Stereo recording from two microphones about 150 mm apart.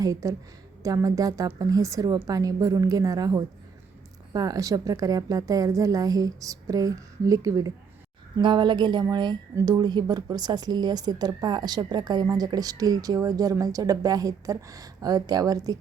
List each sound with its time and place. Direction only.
0.0 s speech: 20° right (ahead or behind)